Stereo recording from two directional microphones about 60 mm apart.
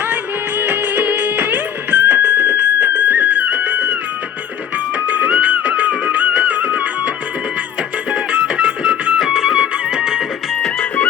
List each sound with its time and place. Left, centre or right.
0.0 s music: right
4.9 s music: right
8.1 s music: centre
10.6 s music: centre